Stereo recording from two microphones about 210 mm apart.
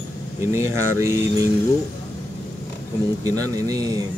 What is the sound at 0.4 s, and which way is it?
Speech, 15° right (ahead or behind).